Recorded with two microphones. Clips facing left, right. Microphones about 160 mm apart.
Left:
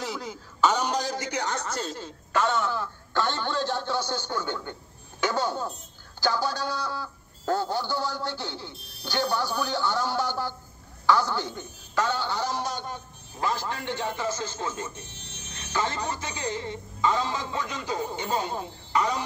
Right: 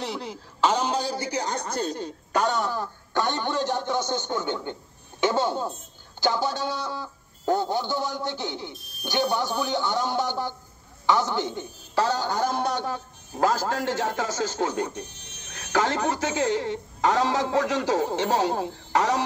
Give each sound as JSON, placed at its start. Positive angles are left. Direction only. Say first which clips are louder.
{"t": 0.7, "sound": "speech", "louder": "right 1 dB", "side_deg": -30}
{"t": 3.1, "sound": "a woman's voice", "louder": "right 2 dB", "side_deg": -15}
{"t": 12.0, "sound": "a man's voice", "louder": "right 3 dB", "side_deg": -40}
{"t": 15.5, "sound": "speech", "louder": "right 5 dB", "side_deg": -90}